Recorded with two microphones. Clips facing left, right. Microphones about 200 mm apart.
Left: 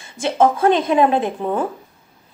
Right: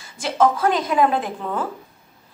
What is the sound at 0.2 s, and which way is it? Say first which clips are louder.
A woman's voice: left 3 dB; 25° left (ahead or behind).